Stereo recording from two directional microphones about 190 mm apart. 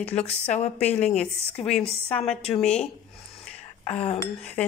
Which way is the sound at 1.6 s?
35° left (ahead or behind).